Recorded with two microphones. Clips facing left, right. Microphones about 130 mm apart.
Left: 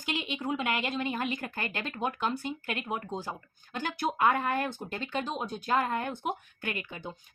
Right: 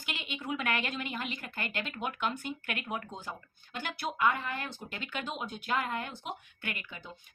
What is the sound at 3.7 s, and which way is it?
Speech, 45° left (ahead or behind).